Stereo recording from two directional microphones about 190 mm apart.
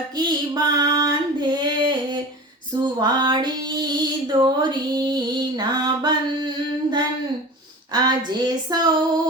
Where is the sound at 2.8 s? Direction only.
25° right (ahead or behind).